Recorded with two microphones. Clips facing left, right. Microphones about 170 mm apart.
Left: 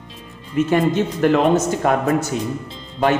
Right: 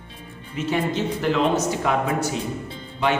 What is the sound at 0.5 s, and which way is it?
A man's voice, 50° left (ahead or behind).